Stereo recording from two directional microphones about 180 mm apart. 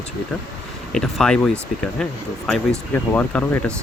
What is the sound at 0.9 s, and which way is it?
Speech, 5° left (ahead or behind).